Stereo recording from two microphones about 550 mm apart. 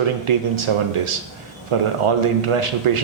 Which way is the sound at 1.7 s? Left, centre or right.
Right.